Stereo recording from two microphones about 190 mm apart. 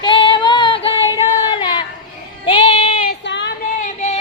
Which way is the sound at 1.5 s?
25° left (ahead or behind).